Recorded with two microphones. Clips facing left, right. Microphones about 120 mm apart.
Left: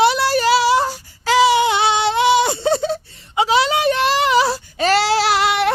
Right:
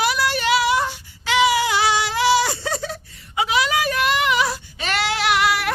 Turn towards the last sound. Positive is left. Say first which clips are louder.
# left 3 dB
turn(degrees=25)  # may be behind; listen again after turning